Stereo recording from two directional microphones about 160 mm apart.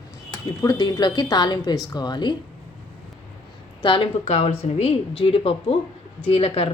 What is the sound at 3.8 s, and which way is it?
A man's voice, 35° left (ahead or behind).